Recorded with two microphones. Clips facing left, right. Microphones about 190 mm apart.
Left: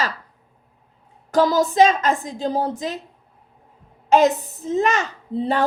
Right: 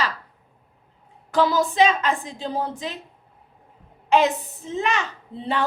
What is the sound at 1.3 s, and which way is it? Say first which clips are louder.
A woman's voice: left 3 dB; 40° left (ahead or behind).